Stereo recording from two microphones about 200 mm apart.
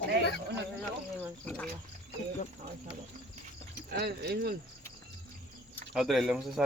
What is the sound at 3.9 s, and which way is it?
Speech, 55° right (ahead or behind).